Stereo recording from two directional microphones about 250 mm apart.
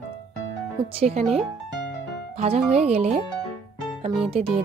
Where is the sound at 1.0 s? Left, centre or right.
Right.